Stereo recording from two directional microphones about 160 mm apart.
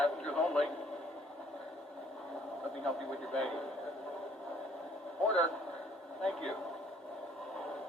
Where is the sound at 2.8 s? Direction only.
5° left (ahead or behind).